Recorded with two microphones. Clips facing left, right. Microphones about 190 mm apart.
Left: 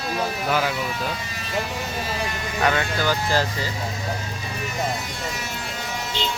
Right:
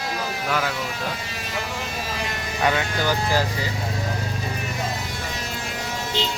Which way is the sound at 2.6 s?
15° right (ahead or behind).